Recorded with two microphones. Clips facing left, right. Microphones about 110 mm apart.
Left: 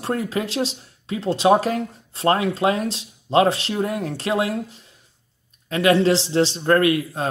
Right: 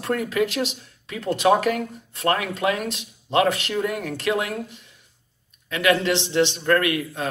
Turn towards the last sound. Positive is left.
turn(degrees=30)  # may be behind; listen again after turning